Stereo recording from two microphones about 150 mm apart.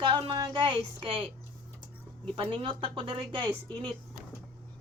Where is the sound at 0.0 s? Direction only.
35° right (ahead or behind).